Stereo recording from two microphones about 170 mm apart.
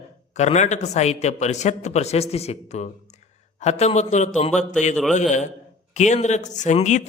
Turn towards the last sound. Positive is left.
turn(degrees=45)  # may be behind; listen again after turning